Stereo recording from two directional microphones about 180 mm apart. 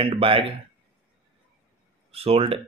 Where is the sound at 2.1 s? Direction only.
35° right (ahead or behind).